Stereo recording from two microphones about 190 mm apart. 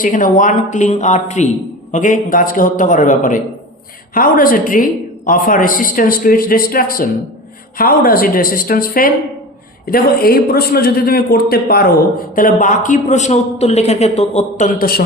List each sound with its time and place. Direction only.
0.0 s a woman's voice: 45° left (ahead or behind)